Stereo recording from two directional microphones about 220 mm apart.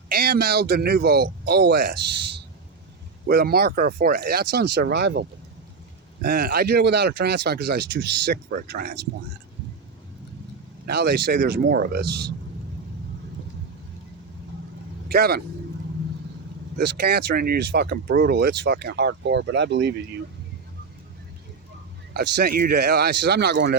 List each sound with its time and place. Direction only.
0.1 s speech: 45° right (ahead or behind)
3.2 s speech: 45° right (ahead or behind)
6.2 s speech: 45° right (ahead or behind)
10.8 s speech: 50° right (ahead or behind)
15.1 s speech: 45° right (ahead or behind)
16.7 s speech: 45° right (ahead or behind)
22.1 s speech: 45° right (ahead or behind)